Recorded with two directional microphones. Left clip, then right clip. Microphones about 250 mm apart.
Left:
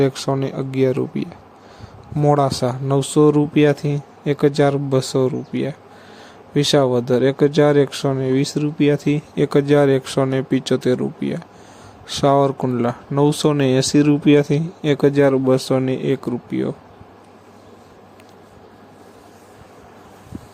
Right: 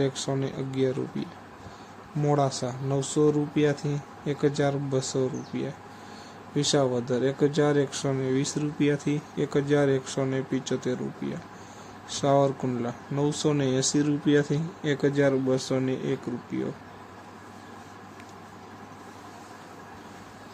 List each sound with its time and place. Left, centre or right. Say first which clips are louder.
0.0 s speech: left 9 dB; left